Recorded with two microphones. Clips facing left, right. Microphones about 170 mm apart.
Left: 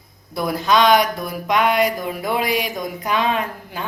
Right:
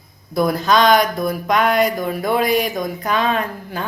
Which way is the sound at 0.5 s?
45° right (ahead or behind).